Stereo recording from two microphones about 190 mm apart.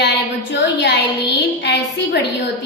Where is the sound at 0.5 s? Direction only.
65° left (ahead or behind).